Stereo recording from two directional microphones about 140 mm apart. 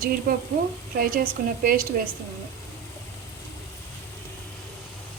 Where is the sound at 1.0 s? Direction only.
90° right.